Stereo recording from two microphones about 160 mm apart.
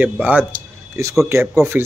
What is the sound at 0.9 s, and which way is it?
Speech, 20° right (ahead or behind).